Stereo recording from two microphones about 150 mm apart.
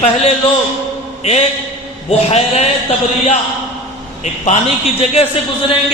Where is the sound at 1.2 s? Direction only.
45° left (ahead or behind).